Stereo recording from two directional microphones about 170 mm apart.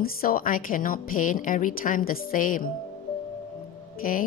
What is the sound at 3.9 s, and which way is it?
Speech, 55° left (ahead or behind).